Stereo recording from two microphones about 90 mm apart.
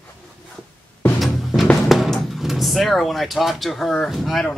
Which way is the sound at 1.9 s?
Centre (ahead or behind).